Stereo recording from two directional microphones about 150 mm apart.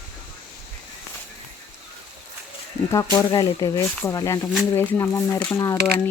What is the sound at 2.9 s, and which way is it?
Speech, 20° left (ahead or behind).